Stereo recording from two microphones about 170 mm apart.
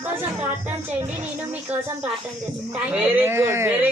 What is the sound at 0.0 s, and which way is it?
Speech, 10° right (ahead or behind).